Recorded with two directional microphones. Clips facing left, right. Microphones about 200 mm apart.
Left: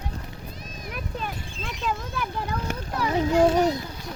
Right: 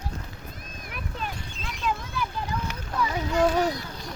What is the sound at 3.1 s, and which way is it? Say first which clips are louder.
Speech: left 5 dB; 30° left (ahead or behind).